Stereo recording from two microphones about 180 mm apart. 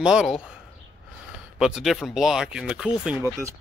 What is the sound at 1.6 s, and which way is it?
Speech, 5° right (ahead or behind).